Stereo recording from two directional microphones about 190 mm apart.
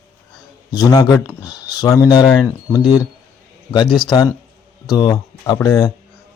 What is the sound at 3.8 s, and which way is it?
Speech, centre (ahead or behind).